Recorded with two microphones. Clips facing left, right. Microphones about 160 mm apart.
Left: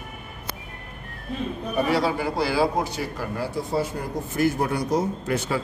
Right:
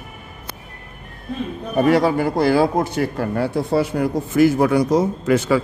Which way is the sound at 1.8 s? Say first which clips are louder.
Right 7 dB; 50° right (ahead or behind).